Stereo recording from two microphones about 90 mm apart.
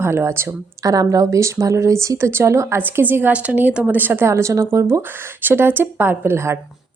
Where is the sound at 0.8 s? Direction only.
40° right (ahead or behind).